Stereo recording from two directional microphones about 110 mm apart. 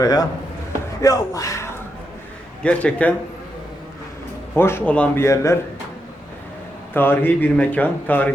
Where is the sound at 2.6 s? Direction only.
10° left (ahead or behind).